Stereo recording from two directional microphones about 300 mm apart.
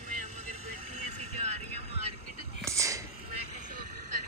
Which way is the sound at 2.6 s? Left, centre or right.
Centre.